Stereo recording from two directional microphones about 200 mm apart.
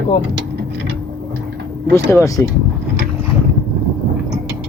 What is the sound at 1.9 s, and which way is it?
Speech, 15° left (ahead or behind).